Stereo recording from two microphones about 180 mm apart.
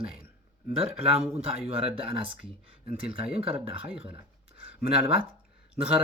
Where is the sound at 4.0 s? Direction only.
35° right (ahead or behind).